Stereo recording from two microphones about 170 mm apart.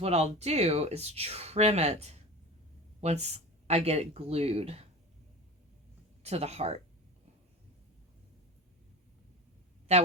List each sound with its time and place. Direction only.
0.0 s speech: 40° right (ahead or behind)
6.2 s speech: 40° right (ahead or behind)